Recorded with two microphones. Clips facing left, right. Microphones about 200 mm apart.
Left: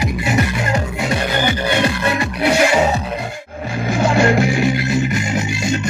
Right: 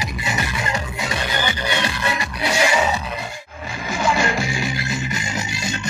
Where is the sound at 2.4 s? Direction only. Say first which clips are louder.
Left 6 dB; 60° left (ahead or behind).